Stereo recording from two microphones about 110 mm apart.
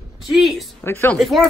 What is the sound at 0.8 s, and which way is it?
Speech, 20° left (ahead or behind).